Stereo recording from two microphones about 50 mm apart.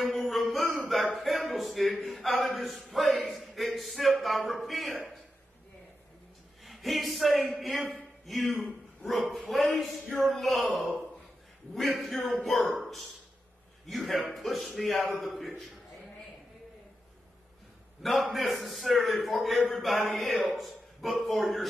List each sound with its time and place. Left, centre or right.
0.0 s a sound: centre
6.6 s a man's voice: centre
18.0 s a man's voice: centre